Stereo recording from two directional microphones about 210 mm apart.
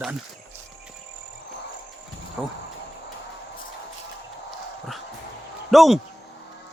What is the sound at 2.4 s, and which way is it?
Speech, centre (ahead or behind).